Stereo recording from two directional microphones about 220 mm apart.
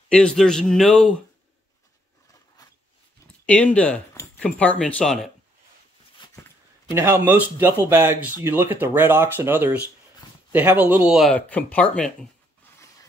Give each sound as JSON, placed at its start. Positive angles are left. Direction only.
{"t": 0.1, "sound": "speech", "side_deg": 5}
{"t": 3.4, "sound": "speech", "side_deg": 5}
{"t": 6.2, "sound": "a sound", "side_deg": 20}
{"t": 6.9, "sound": "speech", "side_deg": -10}